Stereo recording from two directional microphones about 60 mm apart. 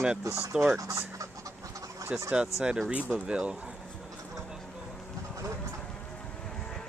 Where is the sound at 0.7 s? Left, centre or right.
Right.